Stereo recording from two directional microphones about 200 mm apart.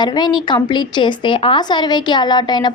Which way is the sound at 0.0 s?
20° left (ahead or behind).